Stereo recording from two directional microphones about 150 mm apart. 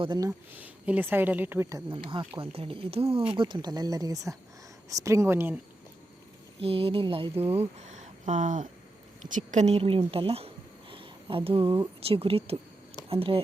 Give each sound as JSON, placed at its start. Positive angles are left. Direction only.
{"t": 0.0, "sound": "speech", "side_deg": -30}
{"t": 0.3, "sound": "a woman's voice", "side_deg": -10}
{"t": 1.9, "sound": "speech", "side_deg": -30}
{"t": 6.6, "sound": "speech", "side_deg": -40}
{"t": 7.5, "sound": "a woman's voice", "side_deg": -45}
{"t": 10.1, "sound": "a sound", "side_deg": -40}
{"t": 12.0, "sound": "speech", "side_deg": -40}